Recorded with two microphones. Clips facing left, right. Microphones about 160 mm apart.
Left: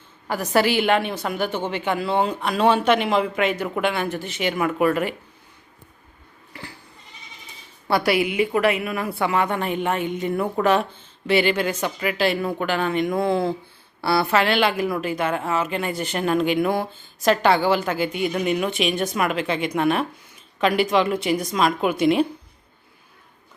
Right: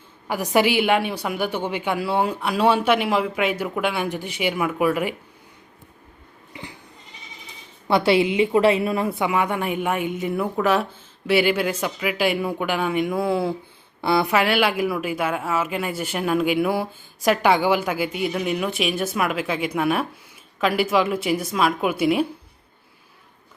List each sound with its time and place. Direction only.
0.3 s speech: 15° right (ahead or behind)
6.5 s goat: 20° right (ahead or behind)
7.9 s a woman's voice: 25° right (ahead or behind)
9.1 s speech: 10° right (ahead or behind)